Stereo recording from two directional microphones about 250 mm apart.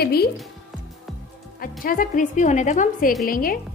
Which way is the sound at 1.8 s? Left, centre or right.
Left.